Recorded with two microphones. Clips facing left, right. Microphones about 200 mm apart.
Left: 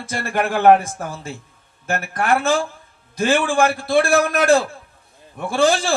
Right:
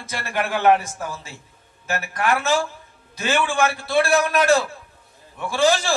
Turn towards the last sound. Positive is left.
turn(degrees=50)  # may be behind; listen again after turning